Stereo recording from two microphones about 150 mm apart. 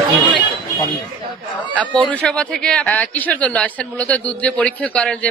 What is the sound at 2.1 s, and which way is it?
A man's voice, 5° left (ahead or behind).